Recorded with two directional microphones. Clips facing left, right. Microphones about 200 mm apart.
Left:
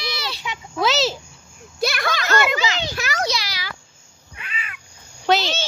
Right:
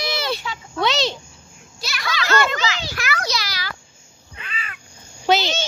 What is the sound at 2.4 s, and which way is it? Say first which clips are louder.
Children playing: left 1 dB; 10° left (ahead or behind).